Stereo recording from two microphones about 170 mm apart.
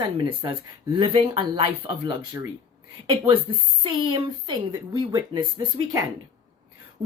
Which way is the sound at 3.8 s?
30° right (ahead or behind).